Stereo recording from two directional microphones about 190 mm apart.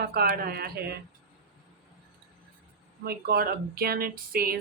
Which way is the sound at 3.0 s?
55° right (ahead or behind).